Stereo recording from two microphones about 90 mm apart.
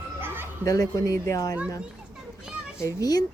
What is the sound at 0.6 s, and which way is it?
Speech, 40° left (ahead or behind).